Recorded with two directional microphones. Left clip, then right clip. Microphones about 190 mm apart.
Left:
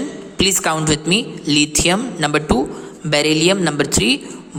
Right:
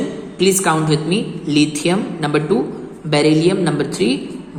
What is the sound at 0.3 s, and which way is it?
A woman's voice, 35° left (ahead or behind).